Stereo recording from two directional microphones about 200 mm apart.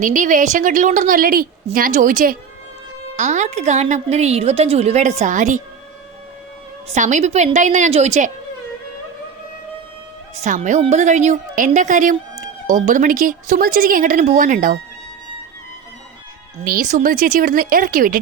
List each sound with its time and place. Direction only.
0.0 s a woman's voice: 40° right (ahead or behind)
6.8 s a woman's voice: 35° right (ahead or behind)
10.4 s a woman's voice: 40° right (ahead or behind)
16.6 s speech: 40° right (ahead or behind)